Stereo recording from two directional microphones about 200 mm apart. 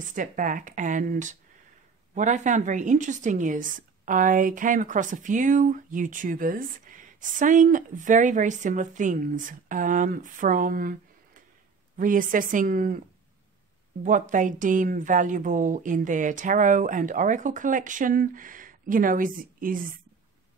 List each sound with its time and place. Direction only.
0.0 s a woman's voice: 40° right (ahead or behind)
14.0 s a woman's voice: 40° right (ahead or behind)